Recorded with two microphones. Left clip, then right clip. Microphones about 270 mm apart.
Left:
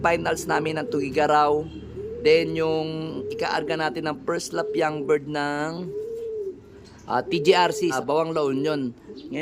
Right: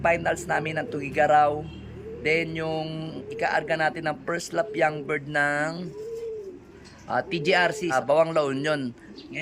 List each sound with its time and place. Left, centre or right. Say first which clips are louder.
0.0 s speech: left 1 dB; centre
7.1 s speech: left 3 dB; centre